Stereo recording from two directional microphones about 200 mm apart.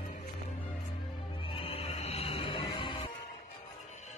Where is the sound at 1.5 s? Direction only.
30° left (ahead or behind).